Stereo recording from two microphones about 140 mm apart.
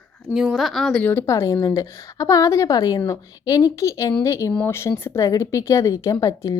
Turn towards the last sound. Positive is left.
turn(degrees=25)  # may be behind; listen again after turning